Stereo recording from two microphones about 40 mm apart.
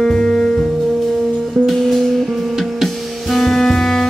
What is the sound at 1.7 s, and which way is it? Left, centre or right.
Music, centre.